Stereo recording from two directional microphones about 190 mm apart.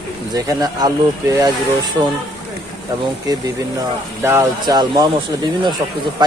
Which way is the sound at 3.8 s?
15° right (ahead or behind).